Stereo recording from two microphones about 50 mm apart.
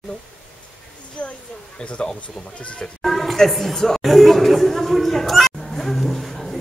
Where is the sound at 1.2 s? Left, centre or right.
Left.